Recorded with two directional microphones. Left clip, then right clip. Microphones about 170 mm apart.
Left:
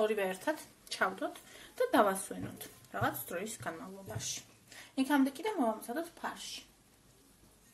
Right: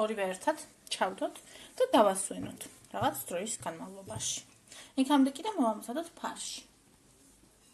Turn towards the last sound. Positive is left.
turn(degrees=-20)  # may be behind; listen again after turning